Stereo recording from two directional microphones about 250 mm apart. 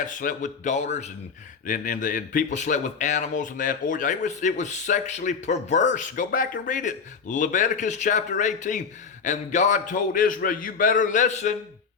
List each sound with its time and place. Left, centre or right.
0.0 s a man's voice: left